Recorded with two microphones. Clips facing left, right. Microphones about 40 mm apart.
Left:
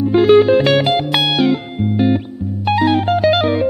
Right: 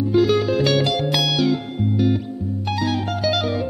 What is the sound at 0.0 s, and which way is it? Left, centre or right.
Music, left.